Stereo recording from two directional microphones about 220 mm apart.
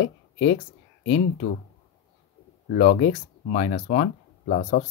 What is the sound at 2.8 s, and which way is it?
Speech, 35° left (ahead or behind).